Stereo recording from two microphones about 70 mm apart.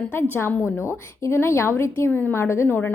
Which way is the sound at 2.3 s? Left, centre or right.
Left.